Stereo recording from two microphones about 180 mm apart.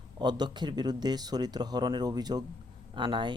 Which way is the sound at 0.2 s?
25° right (ahead or behind).